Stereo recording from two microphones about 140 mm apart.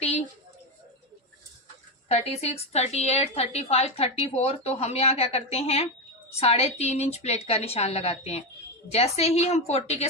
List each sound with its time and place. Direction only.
2.0 s a woman's voice: 50° left (ahead or behind)